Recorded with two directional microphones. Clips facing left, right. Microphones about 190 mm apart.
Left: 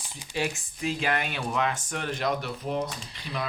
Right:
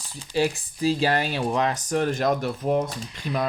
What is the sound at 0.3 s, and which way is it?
Speech, 35° right (ahead or behind).